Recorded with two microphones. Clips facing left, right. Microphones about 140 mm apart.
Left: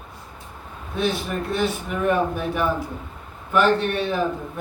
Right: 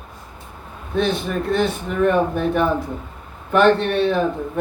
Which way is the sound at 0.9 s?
5° left (ahead or behind).